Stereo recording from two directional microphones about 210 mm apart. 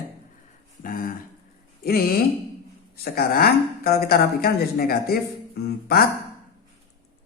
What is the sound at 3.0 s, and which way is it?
A woman's voice, 45° left (ahead or behind).